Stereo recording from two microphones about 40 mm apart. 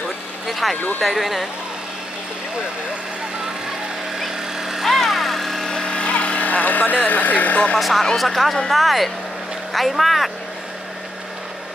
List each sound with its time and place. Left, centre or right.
0.5 s speech: centre
4.2 s vehicle: centre
4.8 s vehicle: centre
5.7 s goat: left
6.4 s speech: left
8.2 s speech: centre